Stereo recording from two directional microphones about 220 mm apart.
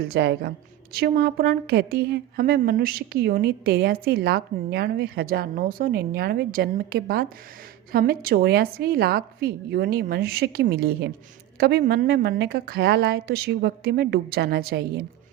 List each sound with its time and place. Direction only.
0.0 s a woman's voice: 50° right (ahead or behind)